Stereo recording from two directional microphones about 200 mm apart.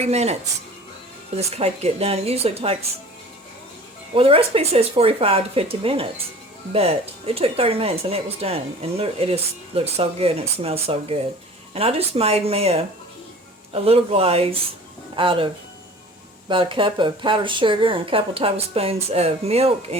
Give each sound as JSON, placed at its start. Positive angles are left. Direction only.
{"t": 0.0, "sound": "speech", "side_deg": -35}
{"t": 1.4, "sound": "speech", "side_deg": -30}
{"t": 4.1, "sound": "speech", "side_deg": -30}
{"t": 16.5, "sound": "speech", "side_deg": -25}